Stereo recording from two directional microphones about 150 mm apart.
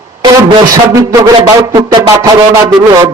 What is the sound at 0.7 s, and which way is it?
A man's voice, 20° right (ahead or behind).